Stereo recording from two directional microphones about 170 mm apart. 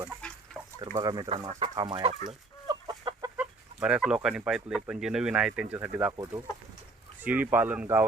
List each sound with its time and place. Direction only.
0.9 s speech: 25° right (ahead or behind)
1.5 s speech: 40° right (ahead or behind)
1.7 s speech: 25° right (ahead or behind)
2.6 s chicken: 25° right (ahead or behind)
3.4 s speech: 5° right (ahead or behind)
7.3 s speech: 10° right (ahead or behind)